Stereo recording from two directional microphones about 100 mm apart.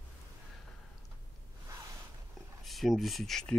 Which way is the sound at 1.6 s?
30° right (ahead or behind).